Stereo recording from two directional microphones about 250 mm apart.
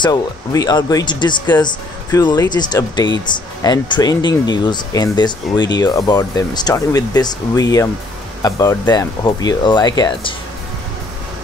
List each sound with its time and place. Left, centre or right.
0.0 s speech: centre